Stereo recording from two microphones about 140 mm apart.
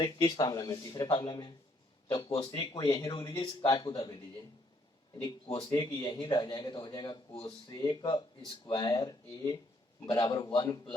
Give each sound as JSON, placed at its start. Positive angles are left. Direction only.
{"t": 0.0, "sound": "a man's voice", "side_deg": 30}
{"t": 5.5, "sound": "speech", "side_deg": 40}
{"t": 5.7, "sound": "a man's voice", "side_deg": 25}